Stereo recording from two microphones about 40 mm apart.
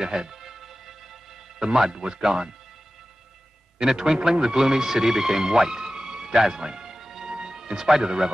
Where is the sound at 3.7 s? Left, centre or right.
Centre.